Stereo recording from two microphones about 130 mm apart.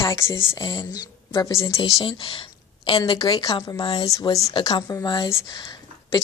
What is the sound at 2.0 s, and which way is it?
A woman's voice, 40° left (ahead or behind).